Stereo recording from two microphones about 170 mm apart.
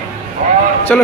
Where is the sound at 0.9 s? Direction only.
5° left (ahead or behind).